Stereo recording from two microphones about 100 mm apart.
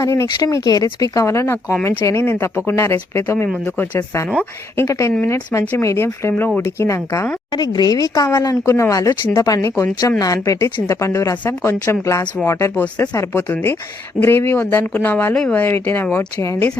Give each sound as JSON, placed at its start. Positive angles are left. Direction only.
{"t": 0.0, "sound": "speech", "side_deg": 30}
{"t": 7.5, "sound": "speech", "side_deg": 45}